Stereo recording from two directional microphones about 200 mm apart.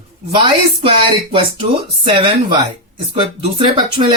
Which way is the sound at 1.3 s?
25° right (ahead or behind).